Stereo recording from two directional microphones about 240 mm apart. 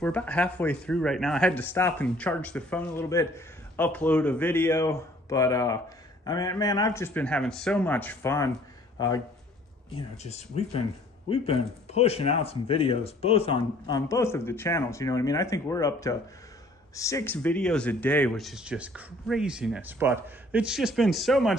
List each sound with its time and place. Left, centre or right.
0.0 s speech: centre
11.2 s speech: left; by 21.5 s centre